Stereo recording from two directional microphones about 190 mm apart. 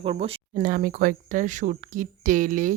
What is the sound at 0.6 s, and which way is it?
A woman's voice, 45° right (ahead or behind).